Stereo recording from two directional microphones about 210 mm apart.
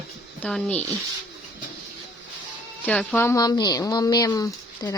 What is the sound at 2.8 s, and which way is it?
Speech, 5° left (ahead or behind).